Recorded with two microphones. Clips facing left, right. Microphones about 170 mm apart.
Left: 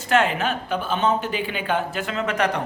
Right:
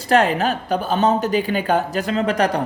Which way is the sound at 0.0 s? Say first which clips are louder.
Right 4 dB; 35° right (ahead or behind).